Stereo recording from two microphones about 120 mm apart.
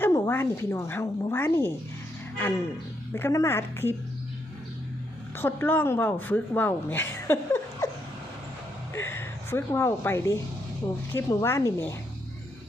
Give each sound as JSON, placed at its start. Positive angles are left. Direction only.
{"t": 0.0, "sound": "a woman's voice", "side_deg": 20}
{"t": 3.1, "sound": "a woman's voice", "side_deg": 20}
{"t": 5.4, "sound": "speech", "side_deg": 20}
{"t": 8.9, "sound": "a woman's voice", "side_deg": 20}